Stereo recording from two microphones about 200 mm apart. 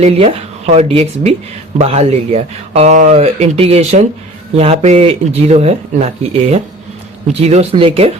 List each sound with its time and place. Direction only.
0.0 s speech: 30° right (ahead or behind)